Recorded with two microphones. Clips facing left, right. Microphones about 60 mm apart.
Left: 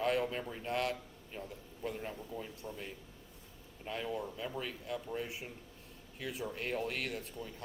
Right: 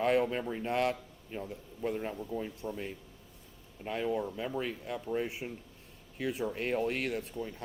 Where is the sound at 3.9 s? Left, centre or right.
Right.